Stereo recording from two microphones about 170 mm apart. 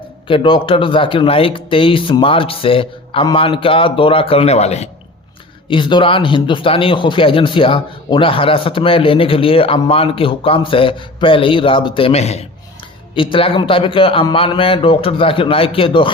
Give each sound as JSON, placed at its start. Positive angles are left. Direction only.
{"t": 0.3, "sound": "speech", "side_deg": 30}
{"t": 5.6, "sound": "speech", "side_deg": 30}